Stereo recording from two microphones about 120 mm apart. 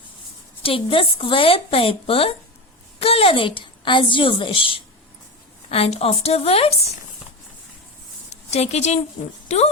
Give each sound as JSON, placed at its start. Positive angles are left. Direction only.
{"t": 0.6, "sound": "a woman's voice", "side_deg": 50}
{"t": 8.4, "sound": "a woman's voice", "side_deg": 65}